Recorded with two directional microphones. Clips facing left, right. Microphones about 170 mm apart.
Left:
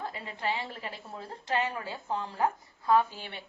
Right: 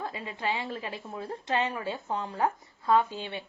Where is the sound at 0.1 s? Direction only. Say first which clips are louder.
Right 1 dB; 20° right (ahead or behind).